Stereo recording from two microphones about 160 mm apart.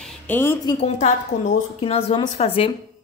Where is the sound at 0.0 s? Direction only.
10° left (ahead or behind).